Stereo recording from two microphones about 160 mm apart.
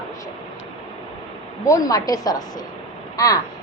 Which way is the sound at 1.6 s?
20° left (ahead or behind).